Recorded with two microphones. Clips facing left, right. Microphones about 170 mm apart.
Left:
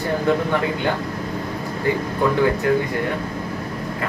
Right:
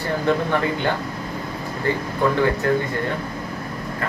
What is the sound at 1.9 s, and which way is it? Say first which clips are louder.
Speech: left 2 dB; 10° left (ahead or behind).